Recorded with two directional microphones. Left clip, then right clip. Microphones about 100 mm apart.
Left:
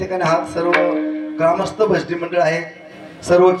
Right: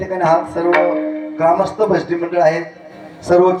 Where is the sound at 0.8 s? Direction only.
40° left (ahead or behind).